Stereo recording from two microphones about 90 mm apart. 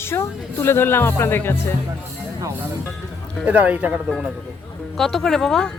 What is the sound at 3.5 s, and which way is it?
Speech, 15° right (ahead or behind).